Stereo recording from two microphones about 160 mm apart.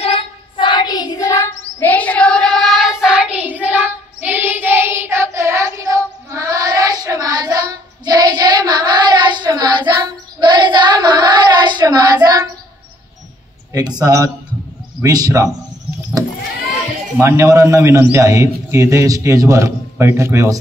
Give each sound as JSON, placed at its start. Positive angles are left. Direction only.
{"t": 0.0, "sound": "child singing", "side_deg": 35}
{"t": 13.7, "sound": "a man's voice", "side_deg": -25}
{"t": 17.2, "sound": "a man's voice", "side_deg": -15}